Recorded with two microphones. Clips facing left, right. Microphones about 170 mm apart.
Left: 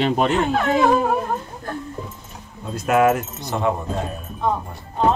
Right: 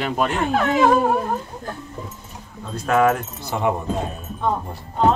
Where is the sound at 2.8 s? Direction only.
10° left (ahead or behind).